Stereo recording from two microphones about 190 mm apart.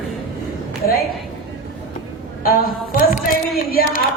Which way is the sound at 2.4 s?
50° left (ahead or behind).